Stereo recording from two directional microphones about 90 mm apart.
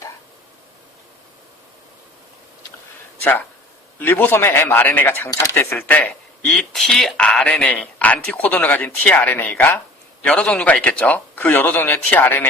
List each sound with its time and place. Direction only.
4.0 s speech: 20° left (ahead or behind)